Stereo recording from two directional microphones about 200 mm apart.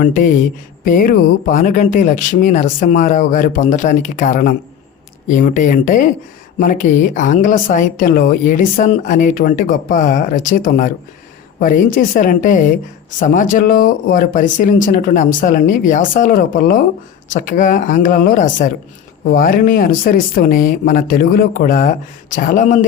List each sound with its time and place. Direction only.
0.0 s speech: 40° left (ahead or behind)
11.9 s speech: 40° left (ahead or behind)